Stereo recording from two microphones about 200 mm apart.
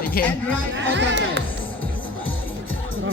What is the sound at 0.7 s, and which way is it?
Speech, 65° right (ahead or behind).